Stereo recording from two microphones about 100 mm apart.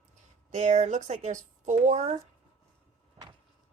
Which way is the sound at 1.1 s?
90° right.